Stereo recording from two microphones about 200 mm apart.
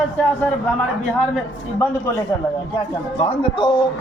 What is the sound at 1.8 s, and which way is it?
Speech, 10° left (ahead or behind).